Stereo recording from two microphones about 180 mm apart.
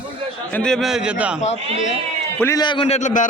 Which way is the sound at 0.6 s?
5° left (ahead or behind).